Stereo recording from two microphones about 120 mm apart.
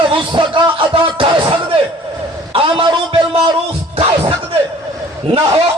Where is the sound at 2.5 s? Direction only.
50° right (ahead or behind).